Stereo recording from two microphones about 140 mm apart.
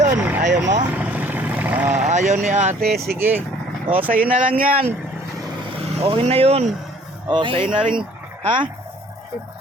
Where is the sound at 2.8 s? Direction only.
90° right.